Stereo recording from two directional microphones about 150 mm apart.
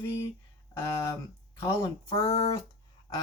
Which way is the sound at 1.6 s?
15° left (ahead or behind).